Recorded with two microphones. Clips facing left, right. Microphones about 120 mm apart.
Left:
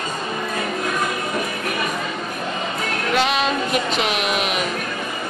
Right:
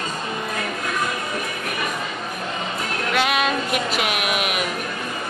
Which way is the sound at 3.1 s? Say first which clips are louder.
Left 1 dB; 5° right (ahead or behind).